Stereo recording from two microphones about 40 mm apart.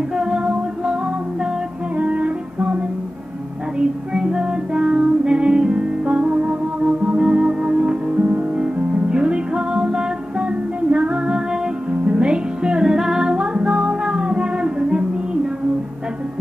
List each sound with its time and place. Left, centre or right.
0.1 s music: right
2.0 s music: right
3.8 s music: centre